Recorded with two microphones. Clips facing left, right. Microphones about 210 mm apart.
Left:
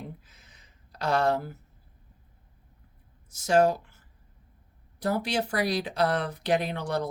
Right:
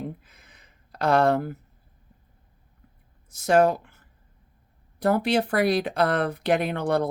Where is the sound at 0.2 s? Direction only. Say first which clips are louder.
Right 3 dB; 55° right (ahead or behind).